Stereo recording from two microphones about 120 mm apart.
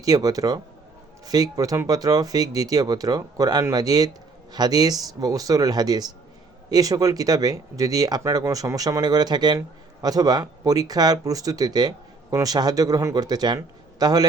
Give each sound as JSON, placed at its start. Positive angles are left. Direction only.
{"t": 0.0, "sound": "speech", "side_deg": -30}